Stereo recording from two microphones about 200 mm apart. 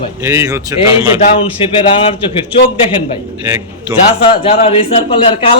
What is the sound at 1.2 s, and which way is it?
A man's voice, 35° left (ahead or behind).